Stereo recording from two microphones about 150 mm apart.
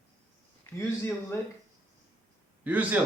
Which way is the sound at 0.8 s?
20° left (ahead or behind).